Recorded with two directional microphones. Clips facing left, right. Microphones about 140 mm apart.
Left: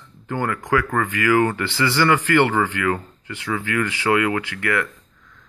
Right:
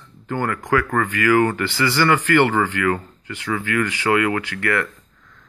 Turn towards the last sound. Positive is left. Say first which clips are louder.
# right 1 dB
turn(degrees=15)  # may be behind; listen again after turning